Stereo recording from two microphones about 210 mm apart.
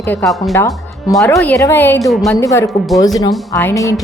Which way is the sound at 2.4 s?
15° left (ahead or behind).